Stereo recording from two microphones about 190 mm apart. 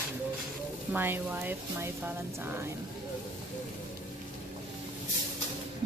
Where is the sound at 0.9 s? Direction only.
10° right (ahead or behind).